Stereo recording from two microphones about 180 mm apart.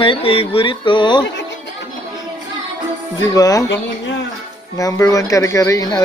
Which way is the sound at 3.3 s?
20° left (ahead or behind).